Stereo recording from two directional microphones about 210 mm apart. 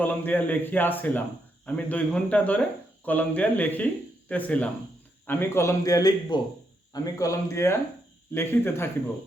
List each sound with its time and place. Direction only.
0.0 s speech: 10° left (ahead or behind)